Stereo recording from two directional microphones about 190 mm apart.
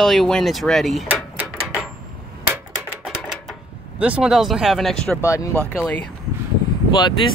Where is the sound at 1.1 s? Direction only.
10° right (ahead or behind).